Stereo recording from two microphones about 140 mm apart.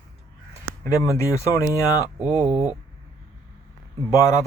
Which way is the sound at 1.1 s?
20° left (ahead or behind).